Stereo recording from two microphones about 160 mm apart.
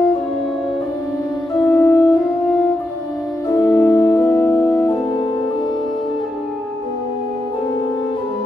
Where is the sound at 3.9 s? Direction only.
20° left (ahead or behind).